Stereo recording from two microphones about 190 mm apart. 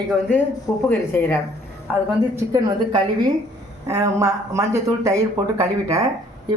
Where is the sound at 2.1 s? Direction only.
15° right (ahead or behind).